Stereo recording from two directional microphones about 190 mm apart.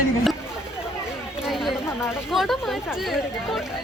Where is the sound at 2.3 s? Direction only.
Centre (ahead or behind).